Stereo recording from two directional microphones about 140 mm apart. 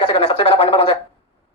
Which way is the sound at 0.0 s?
40° left (ahead or behind).